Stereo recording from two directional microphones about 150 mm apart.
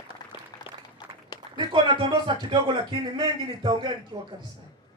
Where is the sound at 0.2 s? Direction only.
25° left (ahead or behind).